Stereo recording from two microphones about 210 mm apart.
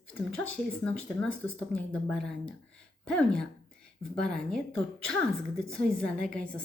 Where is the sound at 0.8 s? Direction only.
5° left (ahead or behind).